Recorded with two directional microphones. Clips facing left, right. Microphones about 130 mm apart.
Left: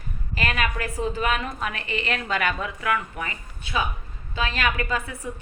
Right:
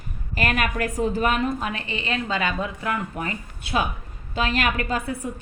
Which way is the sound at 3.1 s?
45° right (ahead or behind).